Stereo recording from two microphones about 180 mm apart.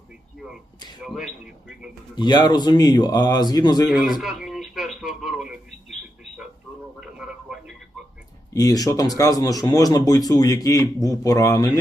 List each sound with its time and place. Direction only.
1.0 s a man's voice: centre (ahead or behind)
2.1 s speech: 25° left (ahead or behind)
3.8 s a man's voice: centre (ahead or behind)
7.0 s radio: 5° right (ahead or behind)
8.5 s speech: 20° left (ahead or behind)